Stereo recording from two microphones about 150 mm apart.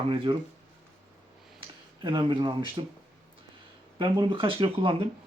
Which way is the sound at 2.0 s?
35° right (ahead or behind).